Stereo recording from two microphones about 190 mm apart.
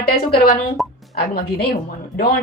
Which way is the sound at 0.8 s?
Centre (ahead or behind).